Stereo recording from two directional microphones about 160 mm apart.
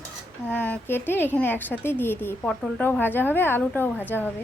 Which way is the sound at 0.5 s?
10° left (ahead or behind).